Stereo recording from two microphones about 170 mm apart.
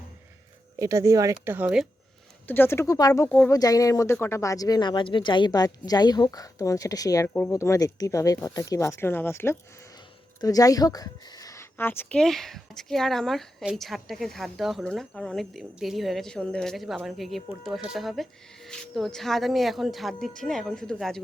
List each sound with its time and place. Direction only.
0.8 s speech: 20° right (ahead or behind)
2.5 s a woman's voice: 15° left (ahead or behind)